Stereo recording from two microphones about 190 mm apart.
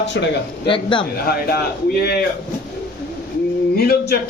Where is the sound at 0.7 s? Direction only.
25° left (ahead or behind).